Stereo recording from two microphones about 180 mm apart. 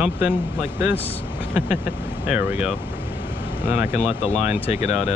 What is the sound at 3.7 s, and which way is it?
Speech, 10° right (ahead or behind).